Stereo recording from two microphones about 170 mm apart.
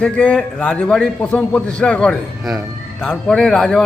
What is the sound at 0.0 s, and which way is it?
A man's voice, 5° left (ahead or behind).